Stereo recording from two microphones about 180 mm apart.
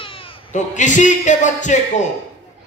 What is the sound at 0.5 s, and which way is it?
A man's voice, 45° left (ahead or behind).